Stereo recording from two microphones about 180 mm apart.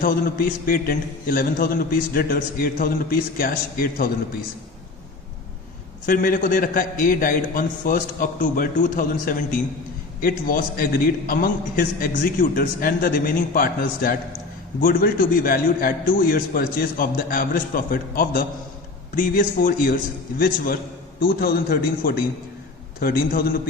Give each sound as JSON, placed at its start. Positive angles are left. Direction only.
{"t": 0.0, "sound": "a man's voice", "side_deg": 55}
{"t": 6.1, "sound": "a man's voice", "side_deg": 50}
{"t": 21.2, "sound": "a man's voice", "side_deg": 55}